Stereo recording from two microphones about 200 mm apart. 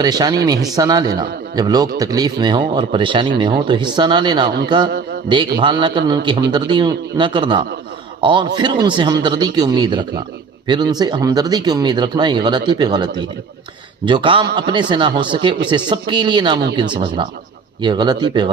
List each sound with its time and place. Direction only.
0.0 s speech: 20° right (ahead or behind)